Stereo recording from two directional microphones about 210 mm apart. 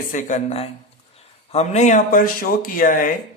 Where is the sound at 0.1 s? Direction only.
35° left (ahead or behind).